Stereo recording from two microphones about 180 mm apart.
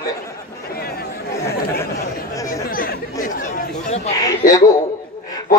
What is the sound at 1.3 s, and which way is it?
Chatter, 15° left (ahead or behind).